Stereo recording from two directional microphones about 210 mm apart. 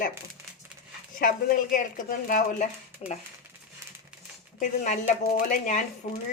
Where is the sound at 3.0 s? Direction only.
25° left (ahead or behind).